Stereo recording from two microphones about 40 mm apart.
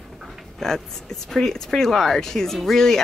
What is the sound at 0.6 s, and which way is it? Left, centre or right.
Speech, centre.